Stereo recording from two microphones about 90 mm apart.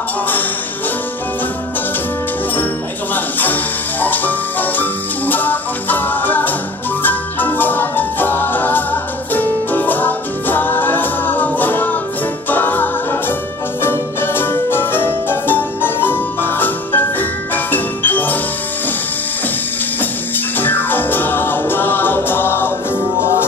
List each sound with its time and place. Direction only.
4.0 s music: 20° left (ahead or behind)
20.0 s music: 20° left (ahead or behind)